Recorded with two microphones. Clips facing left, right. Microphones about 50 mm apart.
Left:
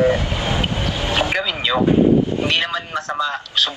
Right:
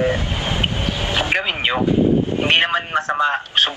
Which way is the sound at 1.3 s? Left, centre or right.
Right.